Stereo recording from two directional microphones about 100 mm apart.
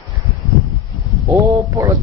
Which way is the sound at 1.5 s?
40° right (ahead or behind).